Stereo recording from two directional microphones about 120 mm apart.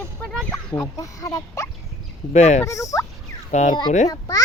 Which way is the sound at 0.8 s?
30° left (ahead or behind).